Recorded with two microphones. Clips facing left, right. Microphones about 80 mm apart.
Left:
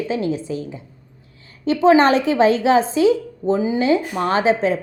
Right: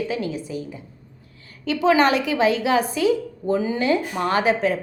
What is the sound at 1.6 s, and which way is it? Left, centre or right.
A woman's voice, left.